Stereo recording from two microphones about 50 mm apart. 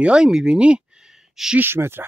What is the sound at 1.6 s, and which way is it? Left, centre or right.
Speech, right.